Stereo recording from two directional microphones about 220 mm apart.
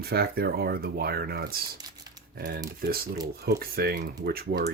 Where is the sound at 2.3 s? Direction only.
45° right (ahead or behind).